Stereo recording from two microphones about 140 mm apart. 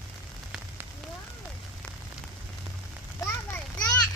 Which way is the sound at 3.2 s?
20° left (ahead or behind).